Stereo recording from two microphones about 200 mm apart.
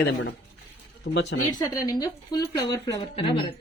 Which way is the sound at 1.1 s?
90° left.